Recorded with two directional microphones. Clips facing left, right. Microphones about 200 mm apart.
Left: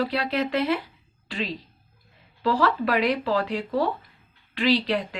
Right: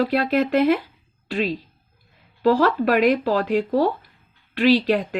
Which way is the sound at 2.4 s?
45° right (ahead or behind).